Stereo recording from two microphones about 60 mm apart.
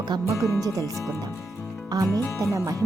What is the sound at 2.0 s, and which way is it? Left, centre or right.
Speech, right.